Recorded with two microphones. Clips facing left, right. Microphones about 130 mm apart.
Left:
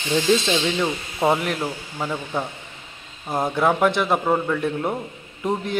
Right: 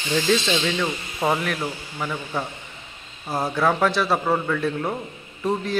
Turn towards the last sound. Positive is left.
turn(degrees=20)  # may be behind; listen again after turning